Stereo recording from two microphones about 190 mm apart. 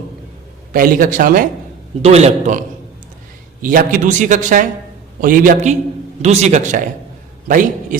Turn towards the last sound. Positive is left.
turn(degrees=-45)  # may be behind; listen again after turning